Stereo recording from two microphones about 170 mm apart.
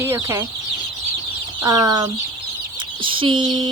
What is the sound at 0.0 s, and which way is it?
Speech, 15° right (ahead or behind).